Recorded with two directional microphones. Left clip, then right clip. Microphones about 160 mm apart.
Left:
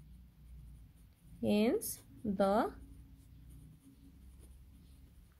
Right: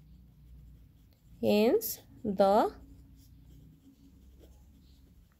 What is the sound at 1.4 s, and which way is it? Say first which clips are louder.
Speech: right 7 dB; 20° right (ahead or behind).